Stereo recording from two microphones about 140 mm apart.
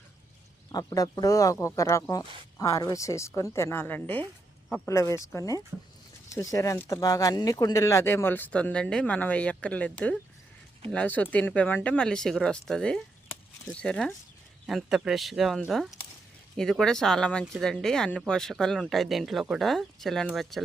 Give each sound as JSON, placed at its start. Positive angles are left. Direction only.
{"t": 0.7, "sound": "speech", "side_deg": 25}